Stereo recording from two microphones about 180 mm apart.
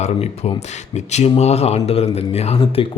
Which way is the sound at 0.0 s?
35° left (ahead or behind).